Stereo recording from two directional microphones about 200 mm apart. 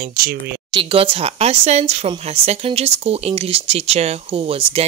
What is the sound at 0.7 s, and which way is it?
Speech, 25° right (ahead or behind).